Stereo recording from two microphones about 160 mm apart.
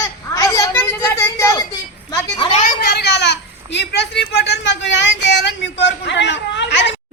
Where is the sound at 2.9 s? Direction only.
90° left.